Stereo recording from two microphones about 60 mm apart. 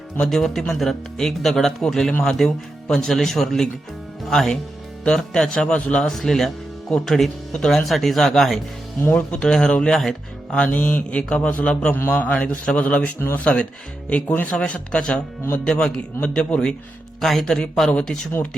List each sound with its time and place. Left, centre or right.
0.2 s a man's voice: centre; by 11.2 s left
11.2 s a man's voice: left
11.9 s a man's voice: left
12.2 s a man's voice: left
17.2 s speech: centre